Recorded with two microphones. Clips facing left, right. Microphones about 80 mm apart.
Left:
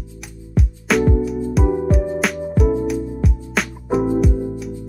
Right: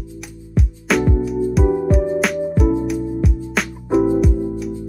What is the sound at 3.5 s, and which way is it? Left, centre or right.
Music, centre.